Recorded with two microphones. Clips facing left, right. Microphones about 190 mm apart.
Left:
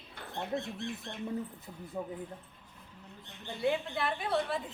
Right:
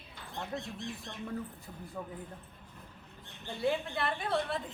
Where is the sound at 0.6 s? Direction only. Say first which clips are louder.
Left 2 dB; 55° left (ahead or behind).